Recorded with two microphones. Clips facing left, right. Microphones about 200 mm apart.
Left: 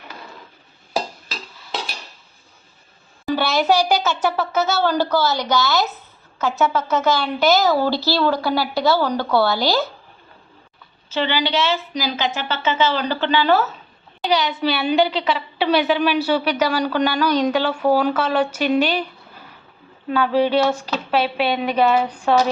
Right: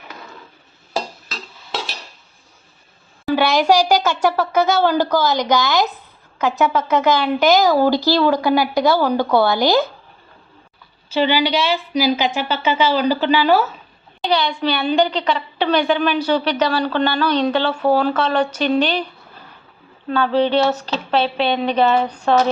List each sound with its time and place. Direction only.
3.7 s a woman's voice: 10° right (ahead or behind)
11.1 s a woman's voice: 10° right (ahead or behind)
14.2 s a woman's voice: 5° left (ahead or behind)
20.1 s a woman's voice: 10° left (ahead or behind)